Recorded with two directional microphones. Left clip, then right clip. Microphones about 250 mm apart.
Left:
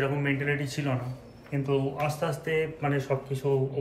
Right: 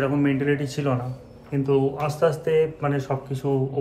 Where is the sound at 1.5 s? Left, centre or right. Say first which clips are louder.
Right 7 dB; centre.